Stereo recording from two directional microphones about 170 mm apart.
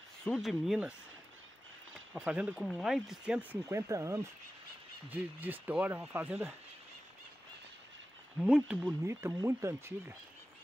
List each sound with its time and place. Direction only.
0.2 s speech: centre (ahead or behind)
2.1 s speech: 10° right (ahead or behind)
2.5 s speech: 5° left (ahead or behind)
3.6 s speech: 20° right (ahead or behind)
8.4 s speech: 5° right (ahead or behind)